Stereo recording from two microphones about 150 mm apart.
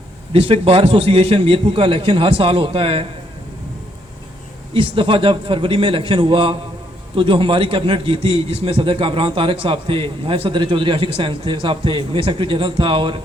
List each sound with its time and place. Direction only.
0.3 s a man's voice: 40° right (ahead or behind)
4.7 s a man's voice: 35° right (ahead or behind)